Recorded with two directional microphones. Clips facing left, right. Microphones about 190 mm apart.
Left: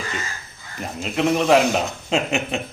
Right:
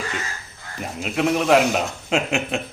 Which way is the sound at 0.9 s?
5° right (ahead or behind).